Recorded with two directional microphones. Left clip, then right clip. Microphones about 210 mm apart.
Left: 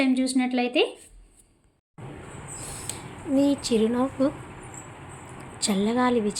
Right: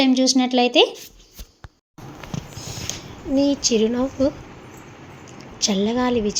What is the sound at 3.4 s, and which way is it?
Speech, 5° right (ahead or behind).